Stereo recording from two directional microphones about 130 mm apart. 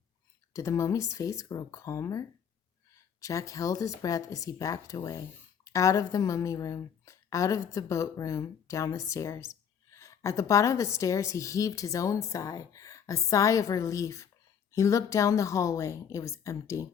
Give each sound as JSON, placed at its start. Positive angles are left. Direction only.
{"t": 0.5, "sound": "speech", "side_deg": 25}